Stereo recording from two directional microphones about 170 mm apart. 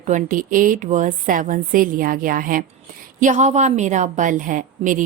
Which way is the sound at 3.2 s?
45° right (ahead or behind).